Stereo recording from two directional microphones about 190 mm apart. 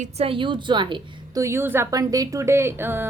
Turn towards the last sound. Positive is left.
turn(degrees=-10)  # may be behind; listen again after turning